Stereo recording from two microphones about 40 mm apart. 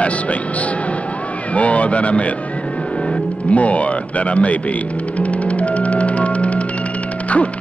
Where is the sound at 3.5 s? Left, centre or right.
Left.